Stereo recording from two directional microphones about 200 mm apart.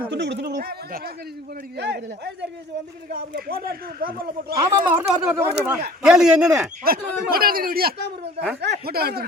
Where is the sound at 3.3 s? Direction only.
50° right (ahead or behind).